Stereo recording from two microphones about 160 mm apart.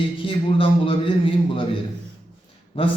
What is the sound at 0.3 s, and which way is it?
A man's voice, 35° left (ahead or behind).